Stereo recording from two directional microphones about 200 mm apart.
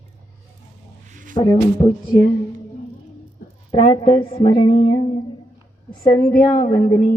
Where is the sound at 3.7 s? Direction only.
25° left (ahead or behind).